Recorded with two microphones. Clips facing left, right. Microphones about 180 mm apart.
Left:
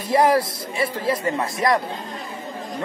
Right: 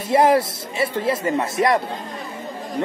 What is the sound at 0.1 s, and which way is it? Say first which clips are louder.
Speech: right 2 dB; 25° right (ahead or behind).